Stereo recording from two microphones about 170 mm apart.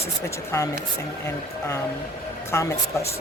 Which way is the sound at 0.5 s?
15° left (ahead or behind).